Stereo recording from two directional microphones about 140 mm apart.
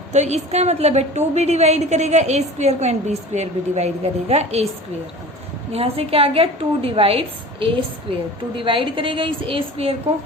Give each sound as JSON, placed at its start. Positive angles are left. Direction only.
{"t": 0.1, "sound": "a woman's voice", "side_deg": -55}
{"t": 5.7, "sound": "a woman's voice", "side_deg": -45}